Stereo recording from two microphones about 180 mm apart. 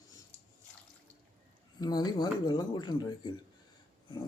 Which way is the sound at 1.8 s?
20° left (ahead or behind).